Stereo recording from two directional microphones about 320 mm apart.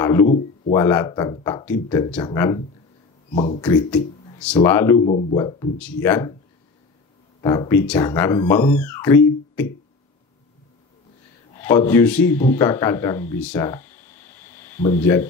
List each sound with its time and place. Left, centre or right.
0.0 s a man's voice: centre
0.3 s a man's voice: left
0.8 s speech: centre
4.9 s speech: centre
7.4 s speech: centre
11.6 s a man's voice: centre